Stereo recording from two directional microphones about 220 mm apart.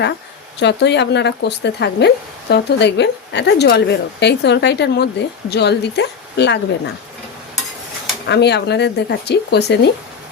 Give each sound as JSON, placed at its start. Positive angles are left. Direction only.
{"t": 0.6, "sound": "speech", "side_deg": 50}
{"t": 8.3, "sound": "speech", "side_deg": 50}